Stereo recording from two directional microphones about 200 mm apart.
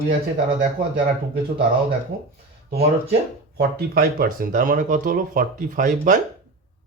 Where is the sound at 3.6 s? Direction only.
50° right (ahead or behind).